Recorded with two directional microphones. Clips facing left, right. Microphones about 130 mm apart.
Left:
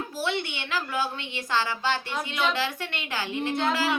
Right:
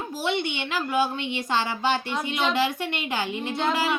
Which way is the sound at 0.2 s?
20° right (ahead or behind).